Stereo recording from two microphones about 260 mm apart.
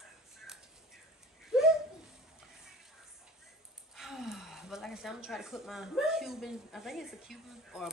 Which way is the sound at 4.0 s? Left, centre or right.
Centre.